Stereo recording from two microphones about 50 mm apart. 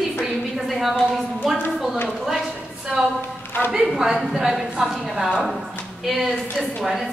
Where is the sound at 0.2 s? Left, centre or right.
Centre.